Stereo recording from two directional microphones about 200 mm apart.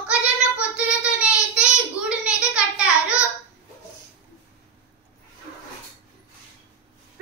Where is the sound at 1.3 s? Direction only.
5° right (ahead or behind).